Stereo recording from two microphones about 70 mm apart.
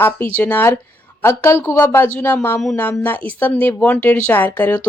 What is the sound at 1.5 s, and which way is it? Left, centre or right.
A woman's voice, left.